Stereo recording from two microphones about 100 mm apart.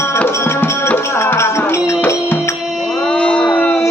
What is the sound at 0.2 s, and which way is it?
Music, 20° left (ahead or behind).